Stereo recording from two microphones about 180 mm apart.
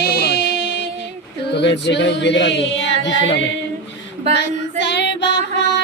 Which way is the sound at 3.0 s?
85° left.